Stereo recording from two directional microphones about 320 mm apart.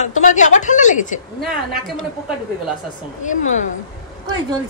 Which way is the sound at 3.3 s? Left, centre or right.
Left.